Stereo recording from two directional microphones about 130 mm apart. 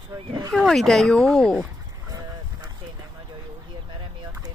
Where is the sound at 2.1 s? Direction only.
30° right (ahead or behind).